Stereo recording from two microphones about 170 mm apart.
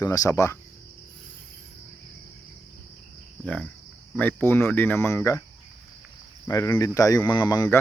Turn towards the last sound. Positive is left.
turn(degrees=20)  # may be behind; listen again after turning